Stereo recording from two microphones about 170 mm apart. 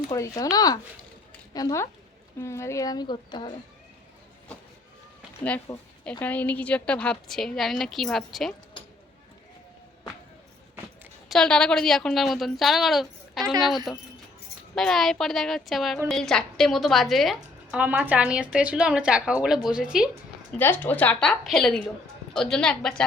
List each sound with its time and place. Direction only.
0.1 s a woman's voice: 20° left (ahead or behind)
5.4 s a woman's voice: 10° left (ahead or behind)
8.8 s a sound: 30° left (ahead or behind)
11.3 s a woman's voice: 5° left (ahead or behind)
20.6 s a woman's voice: 10° left (ahead or behind)